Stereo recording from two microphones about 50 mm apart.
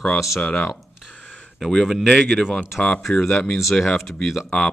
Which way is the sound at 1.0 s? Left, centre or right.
Left.